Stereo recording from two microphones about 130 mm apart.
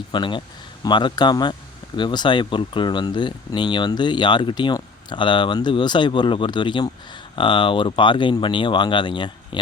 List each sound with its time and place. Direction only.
0.1 s speech: 40° left (ahead or behind)